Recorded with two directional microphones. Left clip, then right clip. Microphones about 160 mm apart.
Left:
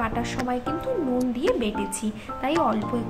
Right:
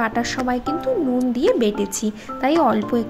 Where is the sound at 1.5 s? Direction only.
35° right (ahead or behind).